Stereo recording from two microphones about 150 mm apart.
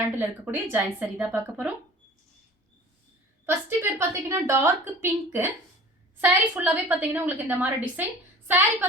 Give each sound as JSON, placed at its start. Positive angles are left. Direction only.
{"t": 0.2, "sound": "a woman's voice", "side_deg": -15}
{"t": 3.4, "sound": "a woman's voice", "side_deg": -15}